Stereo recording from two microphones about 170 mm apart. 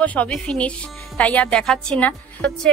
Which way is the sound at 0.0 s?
10° left (ahead or behind).